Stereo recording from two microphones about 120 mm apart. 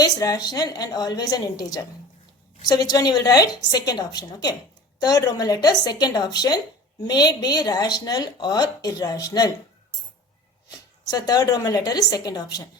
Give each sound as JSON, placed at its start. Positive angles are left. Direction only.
{"t": 0.0, "sound": "a woman's voice", "side_deg": 30}
{"t": 10.7, "sound": "a woman's voice", "side_deg": 30}